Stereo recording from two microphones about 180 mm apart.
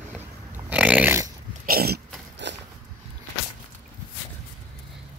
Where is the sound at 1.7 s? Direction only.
60° right (ahead or behind).